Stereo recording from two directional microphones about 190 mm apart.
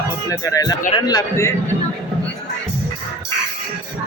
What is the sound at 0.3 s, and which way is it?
A man's voice, 20° left (ahead or behind).